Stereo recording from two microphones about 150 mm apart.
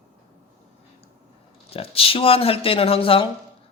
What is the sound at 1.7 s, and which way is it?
A man's voice, 40° left (ahead or behind).